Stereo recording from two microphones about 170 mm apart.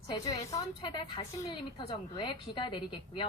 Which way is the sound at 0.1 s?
20° left (ahead or behind).